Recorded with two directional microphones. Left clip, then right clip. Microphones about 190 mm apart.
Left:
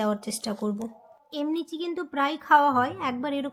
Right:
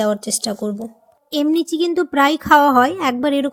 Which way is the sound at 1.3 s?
45° right (ahead or behind).